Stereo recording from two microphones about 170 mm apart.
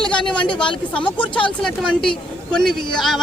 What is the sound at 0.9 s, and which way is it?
Speech, 10° left (ahead or behind).